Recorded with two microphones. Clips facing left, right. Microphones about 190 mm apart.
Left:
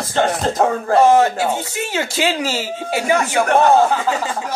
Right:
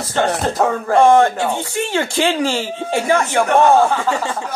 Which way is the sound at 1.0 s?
5° left (ahead or behind).